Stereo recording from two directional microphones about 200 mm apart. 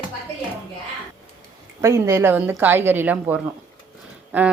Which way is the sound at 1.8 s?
15° right (ahead or behind).